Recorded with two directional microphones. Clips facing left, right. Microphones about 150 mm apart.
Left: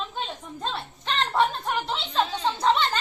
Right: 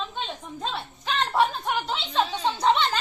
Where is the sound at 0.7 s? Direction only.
Centre (ahead or behind).